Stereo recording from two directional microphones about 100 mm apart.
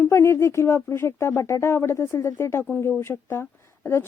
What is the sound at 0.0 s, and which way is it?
A woman's voice, 25° left (ahead or behind).